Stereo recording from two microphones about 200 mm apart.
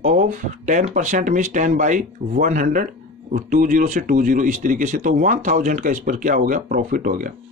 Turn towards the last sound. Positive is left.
turn(degrees=-45)  # may be behind; listen again after turning